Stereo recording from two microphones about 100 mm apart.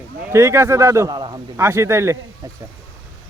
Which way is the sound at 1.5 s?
30° right (ahead or behind).